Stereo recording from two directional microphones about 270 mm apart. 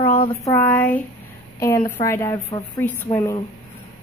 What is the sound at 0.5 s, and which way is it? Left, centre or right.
A woman's voice, centre.